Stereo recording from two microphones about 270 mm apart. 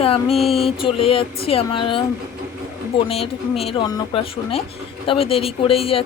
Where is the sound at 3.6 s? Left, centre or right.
Centre.